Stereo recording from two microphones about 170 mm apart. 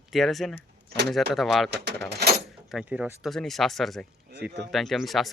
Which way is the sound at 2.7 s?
5° right (ahead or behind).